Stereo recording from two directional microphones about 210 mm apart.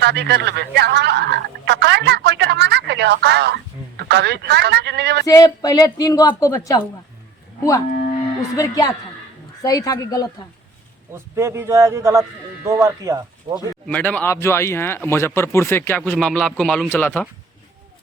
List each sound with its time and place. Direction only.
0.0 s speech: 55° right (ahead or behind)
5.2 s speech: 15° left (ahead or behind)
8.5 s speech: 15° left (ahead or behind)
11.1 s a man's voice: 15° right (ahead or behind)
13.8 s speech: 5° left (ahead or behind)